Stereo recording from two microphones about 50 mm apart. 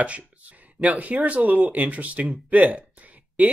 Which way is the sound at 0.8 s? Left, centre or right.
Right.